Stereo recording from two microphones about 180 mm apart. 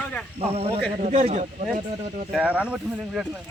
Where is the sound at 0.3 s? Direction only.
35° right (ahead or behind).